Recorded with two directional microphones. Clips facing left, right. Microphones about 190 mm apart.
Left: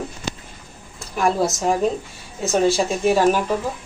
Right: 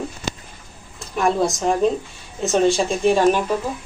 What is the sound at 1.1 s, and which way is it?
Speech, 5° left (ahead or behind).